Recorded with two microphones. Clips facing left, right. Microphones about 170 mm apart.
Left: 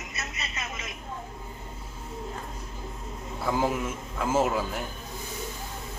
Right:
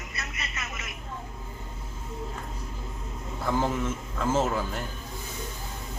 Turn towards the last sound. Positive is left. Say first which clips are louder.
# left 1 dB
turn(degrees=10)  # may be behind; listen again after turning